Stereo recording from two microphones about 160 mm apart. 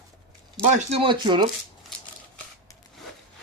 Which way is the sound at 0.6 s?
45° right (ahead or behind).